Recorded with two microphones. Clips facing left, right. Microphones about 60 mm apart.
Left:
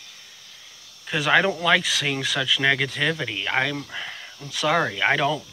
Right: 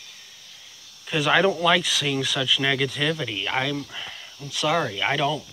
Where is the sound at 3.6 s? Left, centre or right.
Left.